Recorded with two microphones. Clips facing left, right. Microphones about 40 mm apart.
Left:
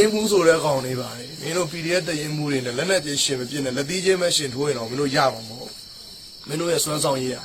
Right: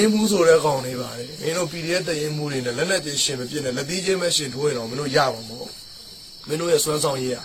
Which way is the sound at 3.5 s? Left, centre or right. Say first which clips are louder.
Even; centre.